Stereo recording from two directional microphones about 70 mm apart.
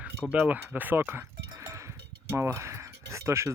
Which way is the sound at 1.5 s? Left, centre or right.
Right.